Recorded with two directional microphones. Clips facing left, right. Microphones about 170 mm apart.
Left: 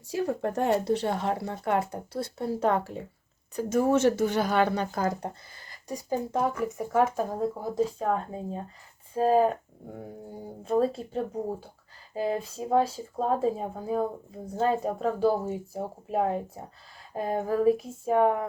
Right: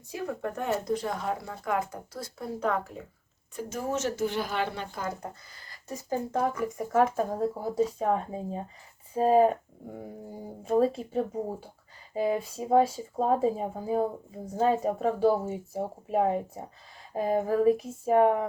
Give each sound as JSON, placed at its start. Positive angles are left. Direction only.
{"t": 0.1, "sound": "speech", "side_deg": 35}
{"t": 3.6, "sound": "speech", "side_deg": 55}
{"t": 5.9, "sound": "a woman's voice", "side_deg": 10}
{"t": 12.2, "sound": "a woman's voice", "side_deg": -10}